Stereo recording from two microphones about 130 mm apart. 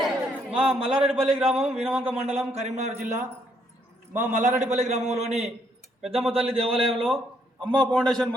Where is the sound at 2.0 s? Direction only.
50° right (ahead or behind).